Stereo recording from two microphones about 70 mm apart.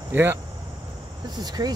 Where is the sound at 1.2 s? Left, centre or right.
Right.